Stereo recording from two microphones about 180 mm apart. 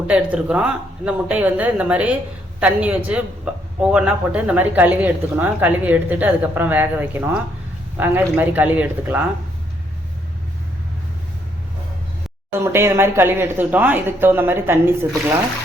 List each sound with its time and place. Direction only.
0.1 s speech: 5° right (ahead or behind)
12.5 s speech: 15° right (ahead or behind)